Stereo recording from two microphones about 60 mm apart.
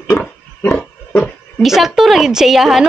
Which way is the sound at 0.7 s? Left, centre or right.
Centre.